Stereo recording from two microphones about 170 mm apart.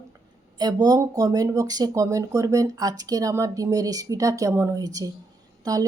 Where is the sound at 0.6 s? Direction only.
20° right (ahead or behind).